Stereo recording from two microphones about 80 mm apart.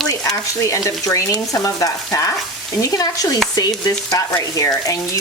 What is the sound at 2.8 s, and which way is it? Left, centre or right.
Stir, left.